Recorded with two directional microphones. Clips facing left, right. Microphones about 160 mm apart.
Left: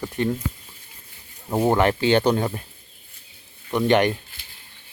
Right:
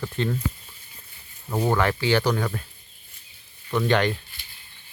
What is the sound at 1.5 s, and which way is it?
Speech, 25° left (ahead or behind).